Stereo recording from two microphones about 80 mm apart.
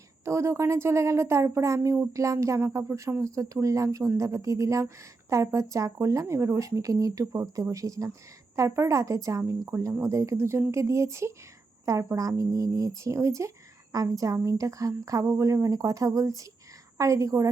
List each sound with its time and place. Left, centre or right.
0.3 s speech: right